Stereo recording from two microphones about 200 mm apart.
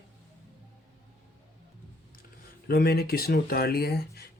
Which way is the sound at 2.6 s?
55° left (ahead or behind).